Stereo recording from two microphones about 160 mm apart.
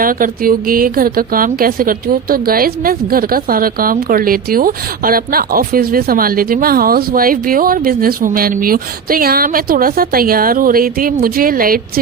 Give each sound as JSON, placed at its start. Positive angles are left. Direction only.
{"t": 0.0, "sound": "a woman's voice", "side_deg": -60}